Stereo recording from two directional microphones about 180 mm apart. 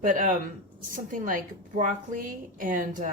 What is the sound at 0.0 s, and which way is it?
A woman's voice, 45° right (ahead or behind).